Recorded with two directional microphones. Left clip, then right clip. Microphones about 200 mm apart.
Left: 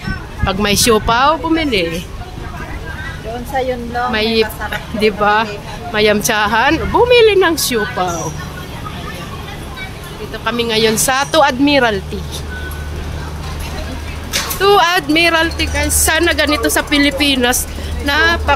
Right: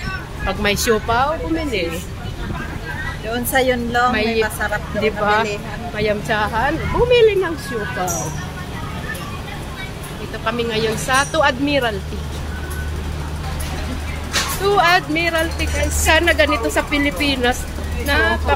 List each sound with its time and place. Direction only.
0.5 s a woman's voice: 25° left (ahead or behind)
3.5 s speech: 35° right (ahead or behind)
4.1 s speech: 20° left (ahead or behind)
5.9 s speech: 30° left (ahead or behind)
10.4 s a woman's voice: 20° left (ahead or behind)
14.6 s a woman's voice: 30° left (ahead or behind)